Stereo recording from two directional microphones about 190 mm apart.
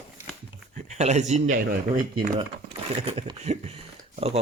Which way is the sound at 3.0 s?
30° right (ahead or behind).